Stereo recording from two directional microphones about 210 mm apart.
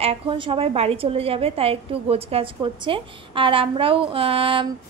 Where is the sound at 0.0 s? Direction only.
25° right (ahead or behind).